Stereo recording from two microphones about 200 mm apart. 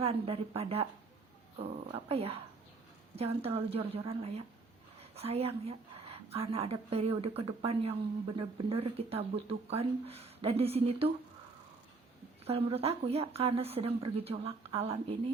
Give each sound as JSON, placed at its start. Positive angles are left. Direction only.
{"t": 0.0, "sound": "a woman's voice", "side_deg": -30}
{"t": 12.5, "sound": "speech", "side_deg": -30}